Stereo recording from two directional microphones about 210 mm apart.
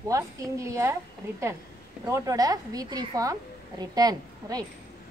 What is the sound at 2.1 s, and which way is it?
Speech, 15° right (ahead or behind).